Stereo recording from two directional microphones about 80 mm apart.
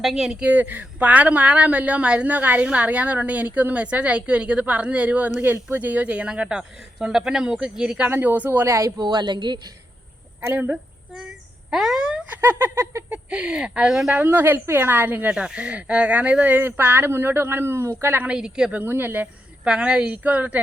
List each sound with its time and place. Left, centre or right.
0.0 s a woman's voice: centre
0.4 s a woman's voice: right
8.1 s speech: right
8.5 s a sound: right
9.0 s speech: right
10.4 s speech: right
11.1 s a sound: centre
12.4 s a sound: right
13.1 s a woman's voice: centre
14.1 s speech: right
15.4 s speech: centre; by 18.2 s right
18.2 s a woman's voice: centre
18.8 s speech: right
19.6 s a woman's voice: centre